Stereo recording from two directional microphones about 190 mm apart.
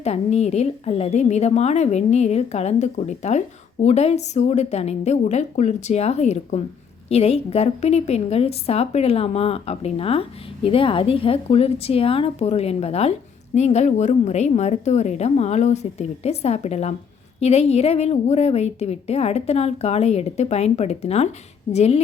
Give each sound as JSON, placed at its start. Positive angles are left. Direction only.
{"t": 0.0, "sound": "a woman's voice", "side_deg": 35}